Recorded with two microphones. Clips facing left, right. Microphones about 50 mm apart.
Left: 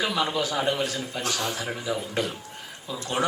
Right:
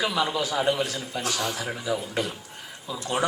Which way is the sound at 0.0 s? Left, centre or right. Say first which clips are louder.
Even; left.